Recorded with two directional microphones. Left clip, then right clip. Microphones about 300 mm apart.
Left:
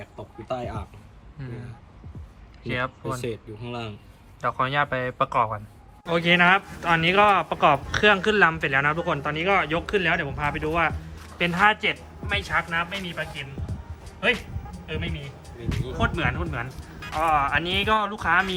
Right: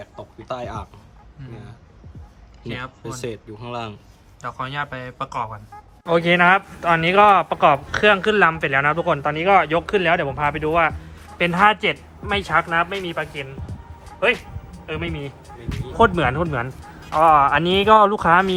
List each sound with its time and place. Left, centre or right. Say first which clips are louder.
0.5 s speech: right 2 dB; centre
2.6 s speech: left 3 dB; centre
3.2 s speech: right 2 dB; centre
4.4 s speech: left 4 dB; centre
14.9 s speech: right 5 dB; centre
15.4 s speech: even; centre